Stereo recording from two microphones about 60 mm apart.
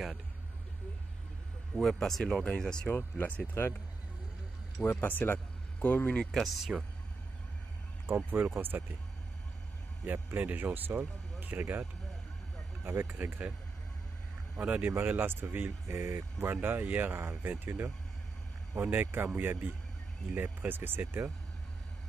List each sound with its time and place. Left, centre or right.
1.8 s speech: centre
2.9 s speech: left
5.0 s speech: left
6.3 s speech: centre
8.3 s speech: right
10.0 s speech: right
12.8 s speech: right
14.6 s speech: right
16.0 s speech: right